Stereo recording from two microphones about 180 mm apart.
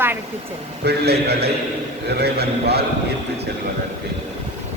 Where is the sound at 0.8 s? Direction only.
65° right (ahead or behind).